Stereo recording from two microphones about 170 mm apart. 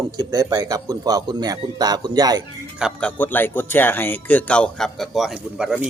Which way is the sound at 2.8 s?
Centre (ahead or behind).